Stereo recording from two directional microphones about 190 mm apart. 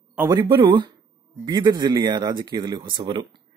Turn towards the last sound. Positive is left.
turn(degrees=-25)  # may be behind; listen again after turning